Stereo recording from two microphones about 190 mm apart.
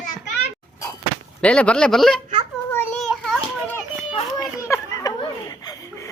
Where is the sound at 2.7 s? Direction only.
10° left (ahead or behind).